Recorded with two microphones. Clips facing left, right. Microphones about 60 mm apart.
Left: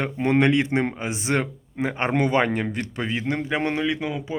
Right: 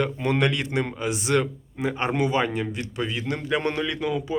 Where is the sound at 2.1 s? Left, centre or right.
Left.